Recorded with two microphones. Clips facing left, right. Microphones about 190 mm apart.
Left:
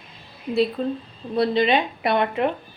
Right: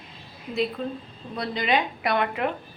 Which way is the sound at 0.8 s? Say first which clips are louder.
Left 5 dB; 35° left (ahead or behind).